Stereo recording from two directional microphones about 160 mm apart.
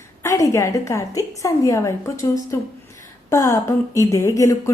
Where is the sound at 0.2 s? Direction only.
20° left (ahead or behind).